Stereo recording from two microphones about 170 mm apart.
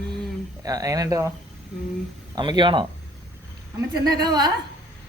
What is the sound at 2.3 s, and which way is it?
Speech, 25° right (ahead or behind).